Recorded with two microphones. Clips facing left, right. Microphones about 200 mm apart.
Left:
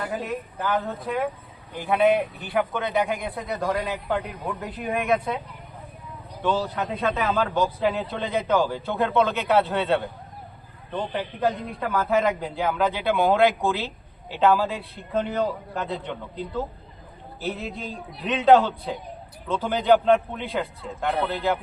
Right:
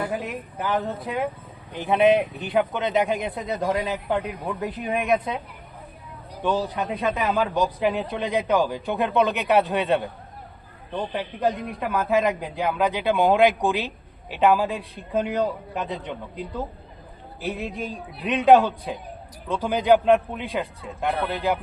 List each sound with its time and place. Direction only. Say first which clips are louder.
0.2 s a man's voice: left 1 dB; 15° right (ahead or behind)
6.4 s a man's voice: right 1 dB; 15° right (ahead or behind)